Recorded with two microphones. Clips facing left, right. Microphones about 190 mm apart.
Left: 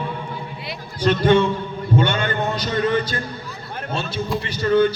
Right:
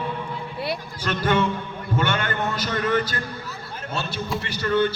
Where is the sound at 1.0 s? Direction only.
25° left (ahead or behind).